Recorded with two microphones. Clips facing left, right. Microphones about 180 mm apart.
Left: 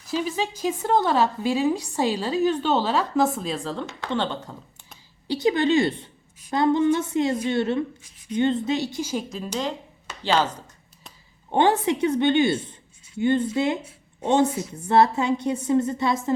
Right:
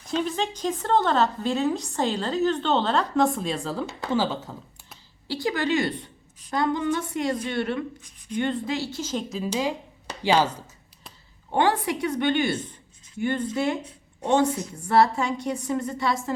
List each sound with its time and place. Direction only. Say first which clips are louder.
0.1 s a woman's voice: even; 5° left (ahead or behind)
5.3 s a woman's voice: left 5 dB; 20° left (ahead or behind)
9.3 s speech: right 2 dB; 5° right (ahead or behind)
11.5 s a woman's voice: left 3 dB; 25° left (ahead or behind)
14.7 s a woman's voice: left 1 dB; 20° left (ahead or behind)